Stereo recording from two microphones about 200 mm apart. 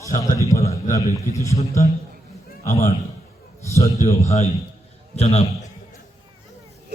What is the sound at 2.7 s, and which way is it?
Speech, 35° left (ahead or behind).